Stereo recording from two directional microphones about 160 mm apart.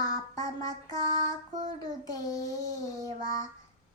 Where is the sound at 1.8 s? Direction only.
20° left (ahead or behind).